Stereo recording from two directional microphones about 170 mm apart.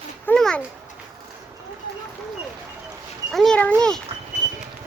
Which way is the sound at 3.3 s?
Centre (ahead or behind).